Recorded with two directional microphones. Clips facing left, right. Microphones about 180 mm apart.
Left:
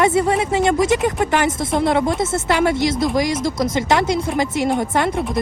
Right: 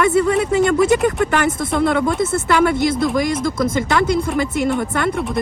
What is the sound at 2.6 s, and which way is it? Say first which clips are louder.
Speech: right 1 dB; 55° right (ahead or behind).